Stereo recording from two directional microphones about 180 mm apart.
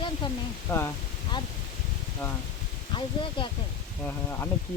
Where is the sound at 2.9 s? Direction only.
30° left (ahead or behind).